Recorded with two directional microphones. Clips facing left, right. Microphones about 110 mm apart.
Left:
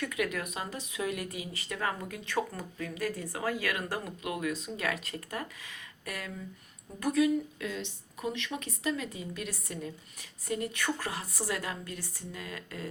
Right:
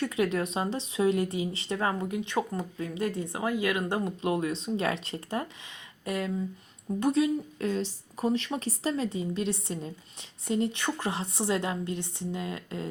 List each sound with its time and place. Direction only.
0.0 s speech: 30° right (ahead or behind)